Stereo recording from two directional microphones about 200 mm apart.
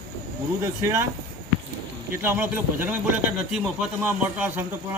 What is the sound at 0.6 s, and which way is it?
Speech, 15° right (ahead or behind).